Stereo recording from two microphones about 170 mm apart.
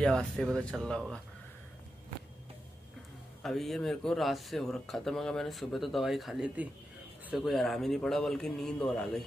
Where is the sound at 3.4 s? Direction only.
Centre (ahead or behind).